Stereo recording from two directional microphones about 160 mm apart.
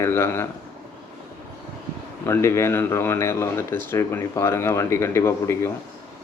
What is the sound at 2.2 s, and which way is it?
Speech, 15° left (ahead or behind).